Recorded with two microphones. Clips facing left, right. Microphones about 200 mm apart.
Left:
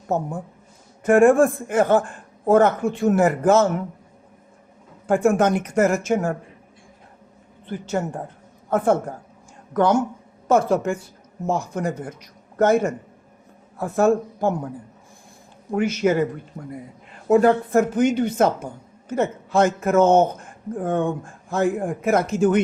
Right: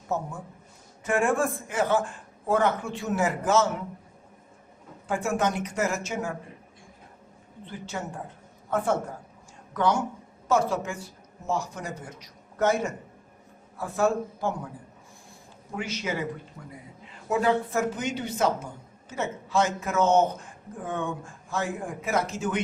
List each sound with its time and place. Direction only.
0.1 s a man's voice: 55° left (ahead or behind)
5.0 s a woman's voice: 55° left (ahead or behind)
7.7 s a woman's voice: 50° left (ahead or behind)
15.7 s a woman's voice: 50° left (ahead or behind)